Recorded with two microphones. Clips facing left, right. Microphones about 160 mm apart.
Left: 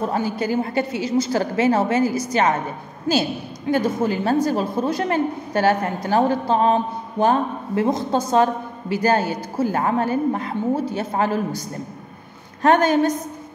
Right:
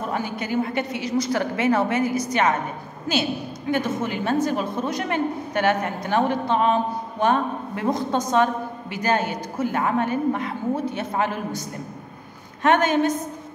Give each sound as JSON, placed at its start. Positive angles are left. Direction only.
{"t": 0.1, "sound": "a man's voice", "side_deg": 35}
{"t": 3.7, "sound": "a man's voice", "side_deg": 35}
{"t": 12.6, "sound": "a man's voice", "side_deg": 35}